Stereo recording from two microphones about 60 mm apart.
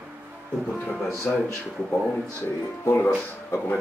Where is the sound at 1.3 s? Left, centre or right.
Centre.